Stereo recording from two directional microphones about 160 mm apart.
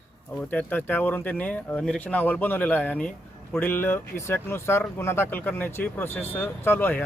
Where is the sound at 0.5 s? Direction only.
10° left (ahead or behind).